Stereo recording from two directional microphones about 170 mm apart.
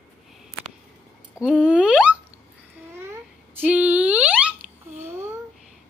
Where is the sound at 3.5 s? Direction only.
10° right (ahead or behind).